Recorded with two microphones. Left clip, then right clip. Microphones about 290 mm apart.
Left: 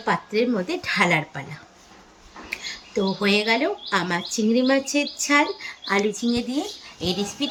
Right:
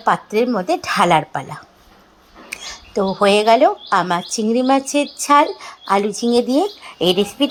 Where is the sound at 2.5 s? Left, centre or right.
Centre.